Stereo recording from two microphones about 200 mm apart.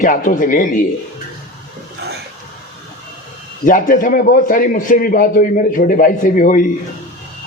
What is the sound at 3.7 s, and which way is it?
A man's voice, 40° left (ahead or behind).